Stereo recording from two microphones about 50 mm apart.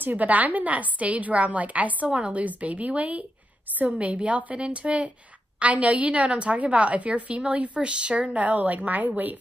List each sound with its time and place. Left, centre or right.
0.0 s a woman's voice: right